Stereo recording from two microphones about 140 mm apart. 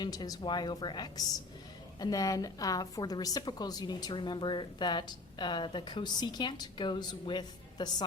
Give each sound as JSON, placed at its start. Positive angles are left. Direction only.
{"t": 0.0, "sound": "a woman's voice", "side_deg": 30}